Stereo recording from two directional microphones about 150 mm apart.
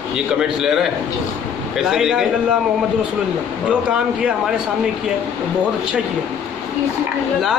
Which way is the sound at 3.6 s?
5° right (ahead or behind).